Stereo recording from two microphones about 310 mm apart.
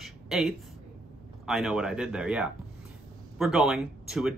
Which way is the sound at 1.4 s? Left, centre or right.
Centre.